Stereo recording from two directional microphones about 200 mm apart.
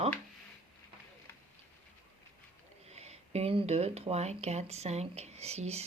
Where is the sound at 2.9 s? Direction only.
30° right (ahead or behind).